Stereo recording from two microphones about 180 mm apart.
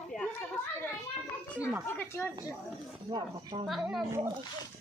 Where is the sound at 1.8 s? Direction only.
10° left (ahead or behind).